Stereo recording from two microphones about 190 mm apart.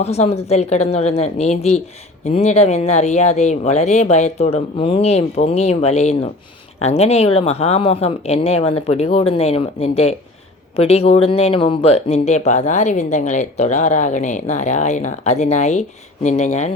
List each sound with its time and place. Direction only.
0.0 s speech: 35° left (ahead or behind)